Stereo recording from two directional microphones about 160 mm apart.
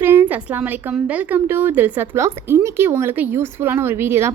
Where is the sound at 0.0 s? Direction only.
15° right (ahead or behind).